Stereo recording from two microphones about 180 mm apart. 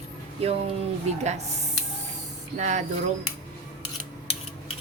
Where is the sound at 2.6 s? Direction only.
40° right (ahead or behind).